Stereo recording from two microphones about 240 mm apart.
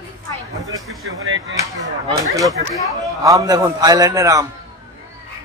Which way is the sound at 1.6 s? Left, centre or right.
Centre.